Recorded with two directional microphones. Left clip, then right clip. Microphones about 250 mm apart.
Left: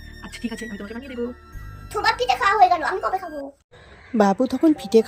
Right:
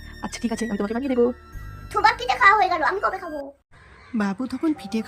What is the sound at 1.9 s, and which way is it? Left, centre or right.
Speech, centre.